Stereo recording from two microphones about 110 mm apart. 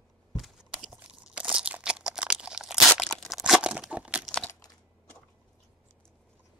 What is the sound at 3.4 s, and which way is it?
Tearing, 10° right (ahead or behind).